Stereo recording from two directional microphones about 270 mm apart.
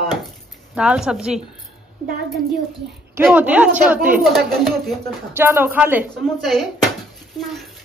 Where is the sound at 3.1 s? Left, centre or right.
Centre.